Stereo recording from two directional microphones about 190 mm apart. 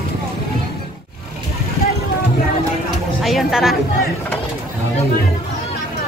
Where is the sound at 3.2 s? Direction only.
Centre (ahead or behind).